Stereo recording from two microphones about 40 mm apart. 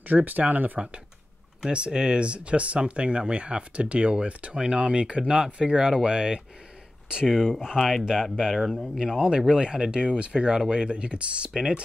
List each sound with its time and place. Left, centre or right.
0.0 s speech: right
1.7 s speech: right
7.2 s speech: centre